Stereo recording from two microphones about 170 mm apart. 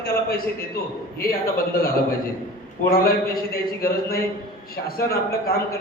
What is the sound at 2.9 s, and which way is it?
A man's voice, 60° left (ahead or behind).